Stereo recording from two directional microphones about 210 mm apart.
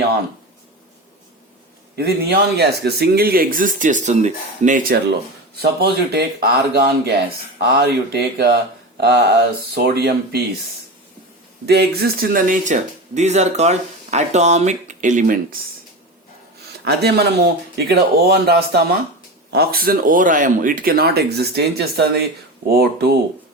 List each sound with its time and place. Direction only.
2.0 s speech: 50° right (ahead or behind)
5.5 s speech: 50° right (ahead or behind)
9.0 s mantra: 50° right (ahead or behind)
9.7 s speech: 50° right (ahead or behind)
11.6 s speech: 50° right (ahead or behind)
16.8 s speech: 50° right (ahead or behind)